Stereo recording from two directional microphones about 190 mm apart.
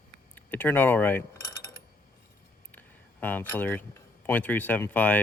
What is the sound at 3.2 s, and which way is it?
A man's voice, 10° left (ahead or behind).